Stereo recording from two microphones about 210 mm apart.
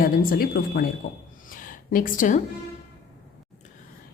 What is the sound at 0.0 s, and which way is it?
Speech, 45° left (ahead or behind).